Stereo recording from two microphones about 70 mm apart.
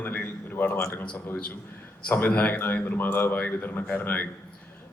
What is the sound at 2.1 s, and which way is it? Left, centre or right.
Speech, left.